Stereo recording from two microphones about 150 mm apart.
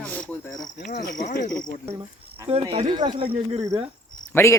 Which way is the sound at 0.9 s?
65° left (ahead or behind).